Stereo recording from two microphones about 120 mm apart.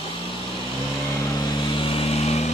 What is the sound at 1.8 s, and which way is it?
Vehicle, 50° left (ahead or behind).